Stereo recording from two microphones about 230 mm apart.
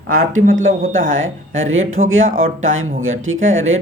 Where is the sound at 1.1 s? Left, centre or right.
Right.